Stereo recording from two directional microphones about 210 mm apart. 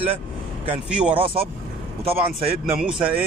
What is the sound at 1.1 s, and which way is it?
Speech, 25° right (ahead or behind).